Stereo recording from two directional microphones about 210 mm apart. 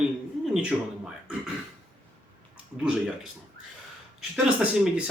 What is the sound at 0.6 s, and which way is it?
Speech, centre (ahead or behind).